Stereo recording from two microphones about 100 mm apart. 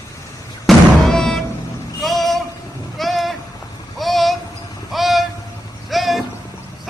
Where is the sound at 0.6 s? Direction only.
5° left (ahead or behind).